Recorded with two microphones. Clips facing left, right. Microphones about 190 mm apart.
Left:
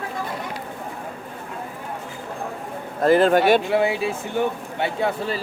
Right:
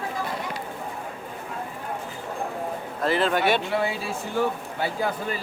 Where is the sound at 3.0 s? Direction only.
45° left (ahead or behind).